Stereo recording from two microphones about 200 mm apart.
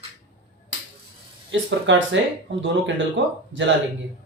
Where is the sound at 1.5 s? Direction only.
70° right (ahead or behind).